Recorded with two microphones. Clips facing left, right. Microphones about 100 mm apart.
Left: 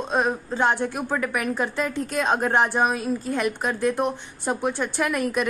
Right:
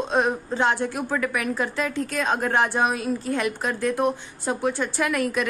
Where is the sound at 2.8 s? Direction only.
5° left (ahead or behind).